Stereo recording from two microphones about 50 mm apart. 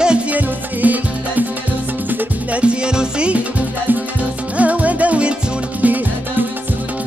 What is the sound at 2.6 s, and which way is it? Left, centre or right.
Music, centre.